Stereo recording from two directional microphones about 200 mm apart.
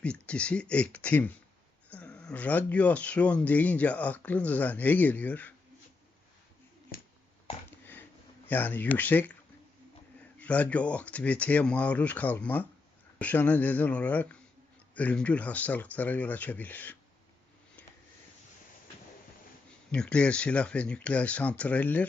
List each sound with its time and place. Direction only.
0.0 s speech: 5° left (ahead or behind)
6.9 s a sound: 45° left (ahead or behind)
8.4 s speech: 10° left (ahead or behind)
10.4 s speech: 5° left (ahead or behind)
19.9 s speech: 5° left (ahead or behind)